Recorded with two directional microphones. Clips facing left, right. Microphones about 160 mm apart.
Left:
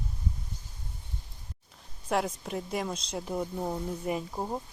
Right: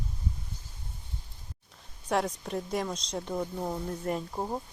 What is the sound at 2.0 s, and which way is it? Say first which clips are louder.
Speech: even; centre (ahead or behind).